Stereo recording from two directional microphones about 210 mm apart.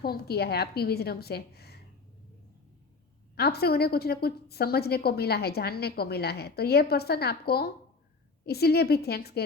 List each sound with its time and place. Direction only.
0.0 s a woman's voice: 50° left (ahead or behind)
3.3 s a woman's voice: 50° left (ahead or behind)